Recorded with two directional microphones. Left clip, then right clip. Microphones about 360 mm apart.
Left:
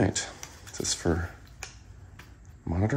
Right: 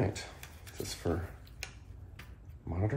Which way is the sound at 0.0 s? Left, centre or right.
Left.